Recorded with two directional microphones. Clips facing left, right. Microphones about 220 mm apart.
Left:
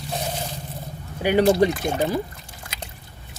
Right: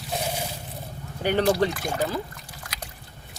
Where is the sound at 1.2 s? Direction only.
10° left (ahead or behind).